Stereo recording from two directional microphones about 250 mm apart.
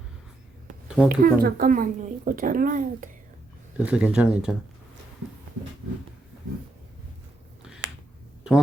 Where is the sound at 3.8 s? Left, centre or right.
Centre.